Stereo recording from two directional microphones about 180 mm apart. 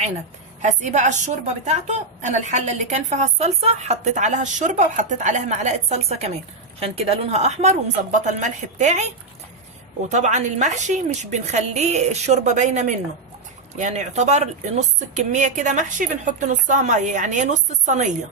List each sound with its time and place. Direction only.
0.6 s a woman's voice: 40° right (ahead or behind)